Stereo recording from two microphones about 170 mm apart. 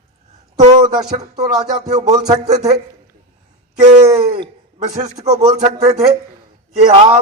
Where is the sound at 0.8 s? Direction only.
25° right (ahead or behind).